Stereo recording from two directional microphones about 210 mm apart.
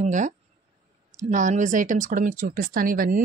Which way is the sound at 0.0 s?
35° right (ahead or behind).